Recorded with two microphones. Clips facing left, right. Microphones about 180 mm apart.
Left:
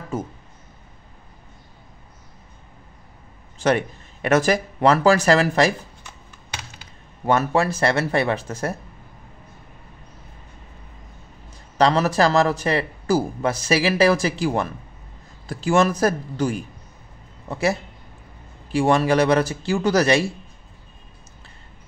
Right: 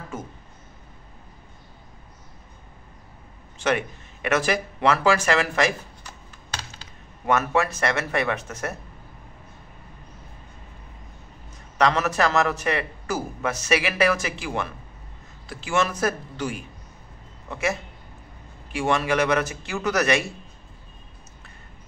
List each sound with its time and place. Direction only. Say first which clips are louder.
3.6 s speech: left 4 dB; 40° left (ahead or behind)
7.2 s speech: left 3 dB; 30° left (ahead or behind)
11.8 s speech: left 4 dB; 30° left (ahead or behind)